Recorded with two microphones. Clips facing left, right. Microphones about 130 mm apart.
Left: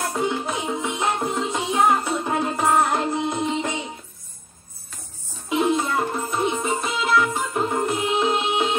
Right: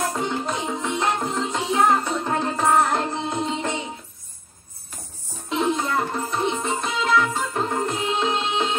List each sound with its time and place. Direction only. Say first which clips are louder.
0.0 s music: left 1 dB; 5° left (ahead or behind)
5.5 s music: left 2 dB; 10° left (ahead or behind)